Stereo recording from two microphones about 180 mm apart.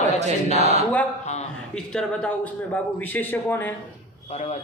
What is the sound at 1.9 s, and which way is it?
A man's voice, 5° left (ahead or behind).